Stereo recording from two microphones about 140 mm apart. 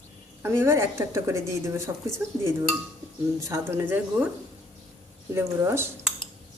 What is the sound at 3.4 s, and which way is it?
Speech, 20° right (ahead or behind).